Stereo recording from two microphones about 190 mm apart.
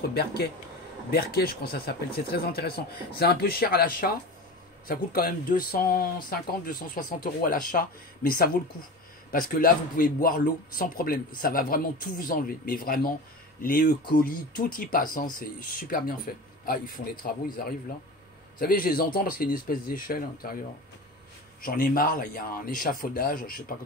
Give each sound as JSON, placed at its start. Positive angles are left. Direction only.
{"t": 0.0, "sound": "a man's voice", "side_deg": 55}
{"t": 21.5, "sound": "a man's voice", "side_deg": 50}